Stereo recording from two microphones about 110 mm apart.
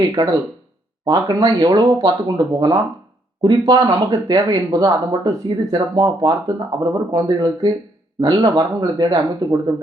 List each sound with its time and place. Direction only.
1.0 s speech: 35° right (ahead or behind)